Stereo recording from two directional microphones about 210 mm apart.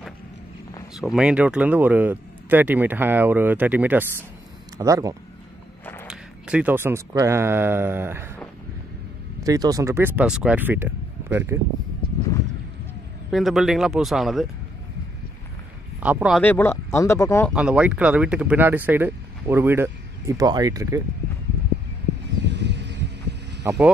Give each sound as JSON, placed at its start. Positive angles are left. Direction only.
{"t": 0.9, "sound": "speech", "side_deg": -5}
{"t": 6.0, "sound": "speech", "side_deg": -5}
{"t": 9.4, "sound": "speech", "side_deg": -15}
{"t": 13.3, "sound": "speech", "side_deg": 0}
{"t": 16.0, "sound": "speech", "side_deg": -5}
{"t": 17.5, "sound": "speech", "side_deg": -5}
{"t": 22.4, "sound": "a sound", "side_deg": -55}
{"t": 23.6, "sound": "speech", "side_deg": -10}